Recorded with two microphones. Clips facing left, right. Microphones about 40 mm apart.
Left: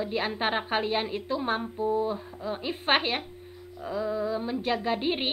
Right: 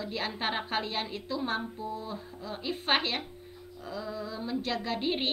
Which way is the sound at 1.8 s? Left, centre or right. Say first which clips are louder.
Left 11 dB; left.